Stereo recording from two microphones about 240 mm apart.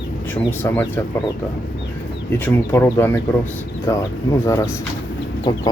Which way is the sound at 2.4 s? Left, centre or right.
Centre.